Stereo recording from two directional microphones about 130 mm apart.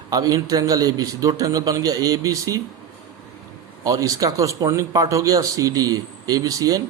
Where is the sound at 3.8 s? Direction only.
25° right (ahead or behind).